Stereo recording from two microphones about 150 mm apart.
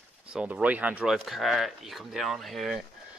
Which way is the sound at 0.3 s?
10° right (ahead or behind).